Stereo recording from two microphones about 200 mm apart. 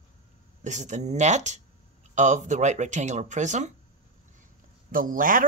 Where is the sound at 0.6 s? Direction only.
35° right (ahead or behind).